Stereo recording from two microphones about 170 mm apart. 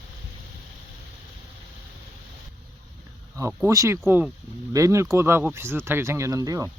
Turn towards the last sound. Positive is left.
turn(degrees=-20)  # may be behind; listen again after turning